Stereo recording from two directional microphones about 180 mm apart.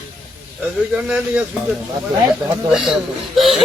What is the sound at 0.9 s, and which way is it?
Speech, 5° right (ahead or behind).